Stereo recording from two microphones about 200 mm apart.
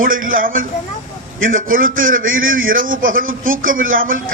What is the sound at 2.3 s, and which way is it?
Speech, 80° right.